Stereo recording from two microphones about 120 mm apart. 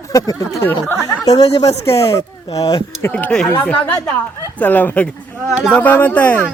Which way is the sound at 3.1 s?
5° left (ahead or behind).